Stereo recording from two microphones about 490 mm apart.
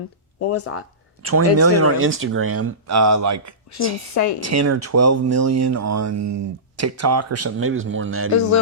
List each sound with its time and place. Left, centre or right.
0.3 s speech: left
1.2 s speech: right
4.1 s a woman's voice: left
4.4 s speech: right